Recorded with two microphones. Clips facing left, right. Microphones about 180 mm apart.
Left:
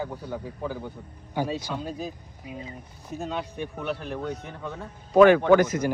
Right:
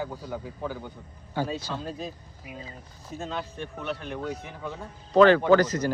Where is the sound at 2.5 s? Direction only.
25° left (ahead or behind).